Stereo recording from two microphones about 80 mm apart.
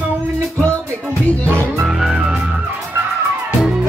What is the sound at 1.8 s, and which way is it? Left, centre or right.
Music, centre.